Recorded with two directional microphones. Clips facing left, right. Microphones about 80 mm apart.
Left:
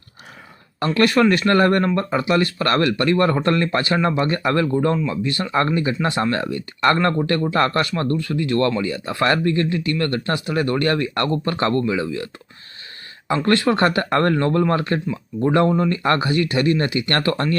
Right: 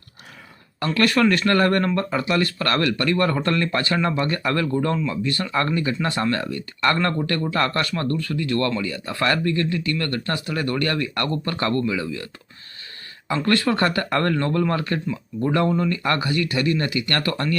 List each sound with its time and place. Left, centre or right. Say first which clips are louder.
0.9 s speech: left 3 dB; left